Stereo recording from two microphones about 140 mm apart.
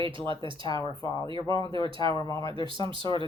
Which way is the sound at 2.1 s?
25° left (ahead or behind).